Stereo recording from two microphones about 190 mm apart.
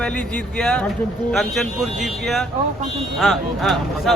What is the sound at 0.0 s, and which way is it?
Speech, 5° left (ahead or behind).